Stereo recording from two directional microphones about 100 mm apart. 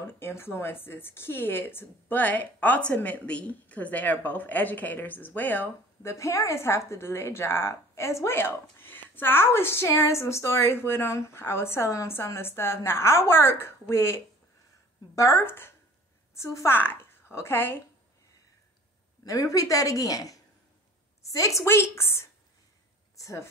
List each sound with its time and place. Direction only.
0.2 s a woman's voice: 25° left (ahead or behind)
6.1 s a woman's voice: 30° left (ahead or behind)
19.2 s a woman's voice: 35° left (ahead or behind)
23.1 s a sound: 30° left (ahead or behind)